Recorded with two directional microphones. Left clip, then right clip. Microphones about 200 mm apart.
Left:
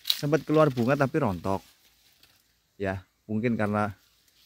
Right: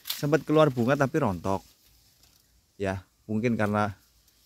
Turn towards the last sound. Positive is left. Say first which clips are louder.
# right 1 dB
turn(degrees=0)  # may be behind; listen again after turning